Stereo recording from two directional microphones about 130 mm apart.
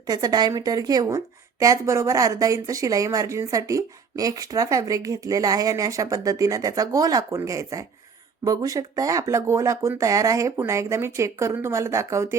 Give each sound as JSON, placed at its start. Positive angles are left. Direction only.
{"t": 0.1, "sound": "a woman's voice", "side_deg": -30}